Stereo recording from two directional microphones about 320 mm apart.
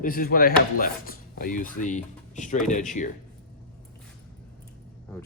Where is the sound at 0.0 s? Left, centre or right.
Left.